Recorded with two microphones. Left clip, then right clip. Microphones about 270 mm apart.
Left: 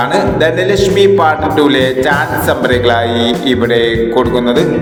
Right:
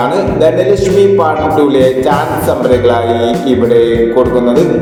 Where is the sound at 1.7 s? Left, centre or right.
Left.